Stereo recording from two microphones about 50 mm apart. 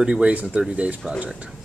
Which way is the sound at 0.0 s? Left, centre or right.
Right.